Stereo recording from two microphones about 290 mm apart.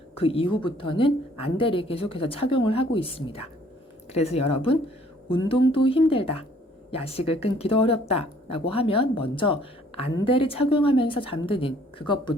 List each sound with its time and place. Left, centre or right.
0.2 s a woman's voice: centre